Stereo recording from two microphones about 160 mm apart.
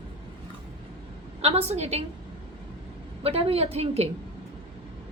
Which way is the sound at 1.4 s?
40° right (ahead or behind).